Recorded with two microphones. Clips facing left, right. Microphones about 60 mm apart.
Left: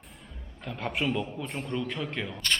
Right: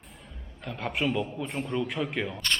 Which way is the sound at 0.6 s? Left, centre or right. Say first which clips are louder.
Right 1 dB; centre.